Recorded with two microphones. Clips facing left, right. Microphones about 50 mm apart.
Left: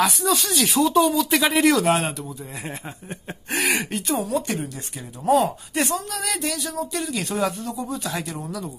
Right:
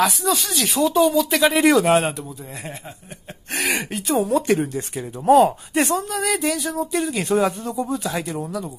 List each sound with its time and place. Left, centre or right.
0.0 s speech: centre
3.5 s speech: centre
4.2 s speech: right
6.0 s a sound: centre
6.9 s speech: centre
8.3 s a sound: centre